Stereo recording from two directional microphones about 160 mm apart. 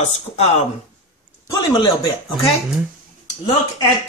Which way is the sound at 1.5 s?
20° left (ahead or behind).